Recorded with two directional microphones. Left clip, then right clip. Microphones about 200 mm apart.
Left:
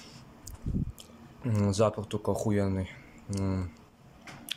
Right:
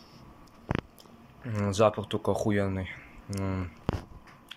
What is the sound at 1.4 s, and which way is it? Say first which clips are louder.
Speech: right 3 dB; 10° left (ahead or behind).